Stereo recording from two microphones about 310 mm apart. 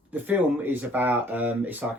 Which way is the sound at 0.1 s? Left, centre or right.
Centre.